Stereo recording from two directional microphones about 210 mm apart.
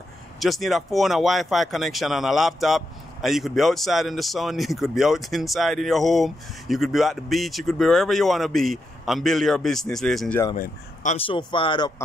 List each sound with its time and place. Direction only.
0.4 s speech: centre (ahead or behind)
10.5 s speech: 35° left (ahead or behind)
11.2 s speech: 25° left (ahead or behind)